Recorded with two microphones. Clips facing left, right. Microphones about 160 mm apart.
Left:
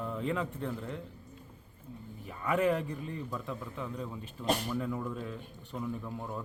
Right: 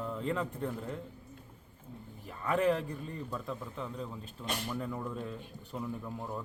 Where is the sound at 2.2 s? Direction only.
5° left (ahead or behind).